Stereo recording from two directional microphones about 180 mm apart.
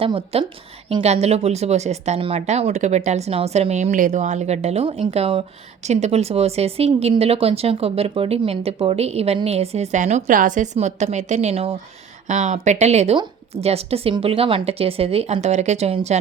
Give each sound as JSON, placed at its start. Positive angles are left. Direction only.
{"t": 0.0, "sound": "speech", "side_deg": -30}